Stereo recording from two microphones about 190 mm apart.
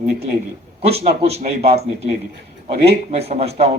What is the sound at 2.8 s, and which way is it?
Speech, 35° right (ahead or behind).